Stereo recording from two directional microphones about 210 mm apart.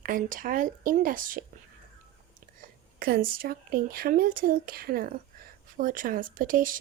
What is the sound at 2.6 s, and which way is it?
Speech, 45° right (ahead or behind).